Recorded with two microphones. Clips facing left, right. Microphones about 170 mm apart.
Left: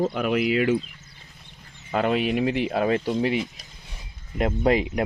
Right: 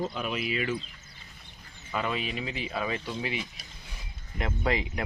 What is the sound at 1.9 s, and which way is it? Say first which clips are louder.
Speech: left 9 dB; 60° left (ahead or behind).